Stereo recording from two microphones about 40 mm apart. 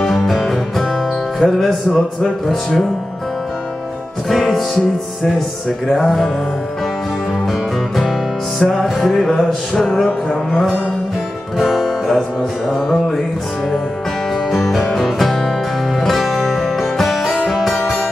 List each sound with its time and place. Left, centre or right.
0.0 s music: centre
4.3 s music: centre
6.0 s music: centre
8.5 s music: centre
9.4 s music: centre
9.9 s music: centre
14.5 s music: centre